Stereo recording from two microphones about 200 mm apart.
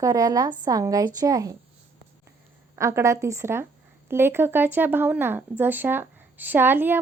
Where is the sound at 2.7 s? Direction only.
15° right (ahead or behind).